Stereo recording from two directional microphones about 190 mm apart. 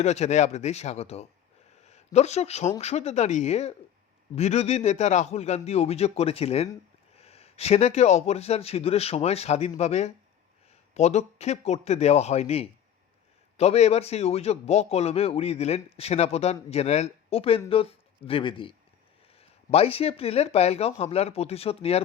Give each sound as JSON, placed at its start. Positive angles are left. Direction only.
{"t": 0.0, "sound": "a man's voice", "side_deg": 35}